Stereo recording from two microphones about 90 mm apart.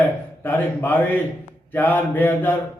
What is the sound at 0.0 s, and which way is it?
Speech, 20° left (ahead or behind).